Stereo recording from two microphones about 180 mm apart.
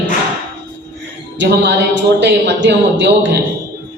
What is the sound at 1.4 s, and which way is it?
Speech, 75° right (ahead or behind).